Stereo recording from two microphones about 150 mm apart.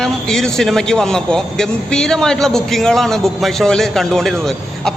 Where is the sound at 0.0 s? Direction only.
5° left (ahead or behind).